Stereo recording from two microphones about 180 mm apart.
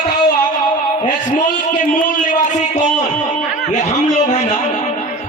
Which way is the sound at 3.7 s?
40° left (ahead or behind).